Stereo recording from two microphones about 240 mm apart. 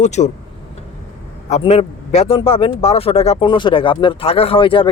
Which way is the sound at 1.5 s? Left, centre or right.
Left.